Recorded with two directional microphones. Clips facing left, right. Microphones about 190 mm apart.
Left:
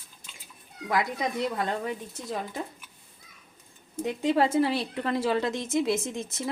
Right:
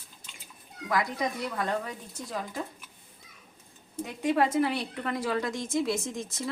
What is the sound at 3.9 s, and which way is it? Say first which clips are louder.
A woman's voice: left 2 dB; 25° left (ahead or behind).